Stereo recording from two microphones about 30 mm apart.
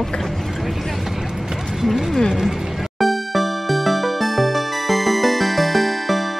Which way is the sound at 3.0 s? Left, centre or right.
Centre.